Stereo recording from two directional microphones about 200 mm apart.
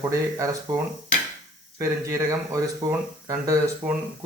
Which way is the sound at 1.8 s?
15° right (ahead or behind).